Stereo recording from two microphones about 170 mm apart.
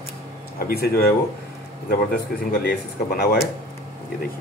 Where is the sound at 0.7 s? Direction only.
65° left (ahead or behind).